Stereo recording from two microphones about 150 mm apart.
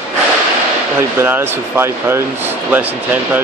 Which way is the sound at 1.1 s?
15° right (ahead or behind).